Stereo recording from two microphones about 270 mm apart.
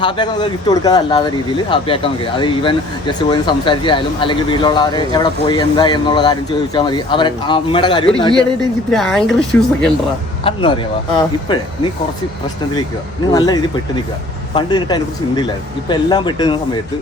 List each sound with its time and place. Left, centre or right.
0.0 s speech: centre
8.9 s speech: centre
10.4 s speech: centre
13.3 s speech: centre